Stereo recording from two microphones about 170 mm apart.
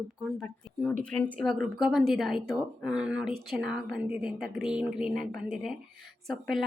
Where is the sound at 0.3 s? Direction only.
5° left (ahead or behind).